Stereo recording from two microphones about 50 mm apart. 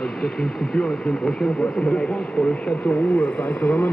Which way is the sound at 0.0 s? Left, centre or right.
Centre.